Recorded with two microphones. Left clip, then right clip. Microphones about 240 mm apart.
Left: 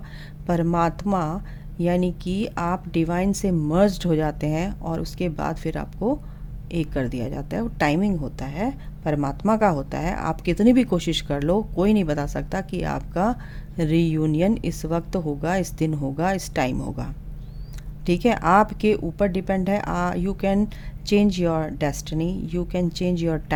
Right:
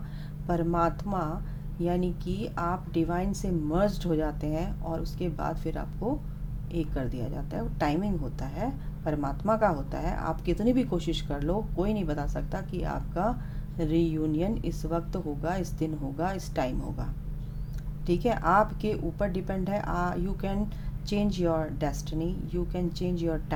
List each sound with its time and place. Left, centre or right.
0.4 s a woman's voice: left